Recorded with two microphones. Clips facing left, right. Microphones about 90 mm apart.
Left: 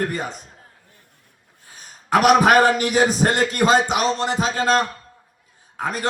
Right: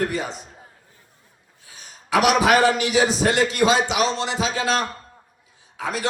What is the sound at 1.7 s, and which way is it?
A man's voice, 45° left (ahead or behind).